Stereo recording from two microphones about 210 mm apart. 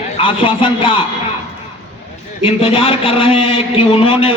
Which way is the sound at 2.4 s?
25° left (ahead or behind).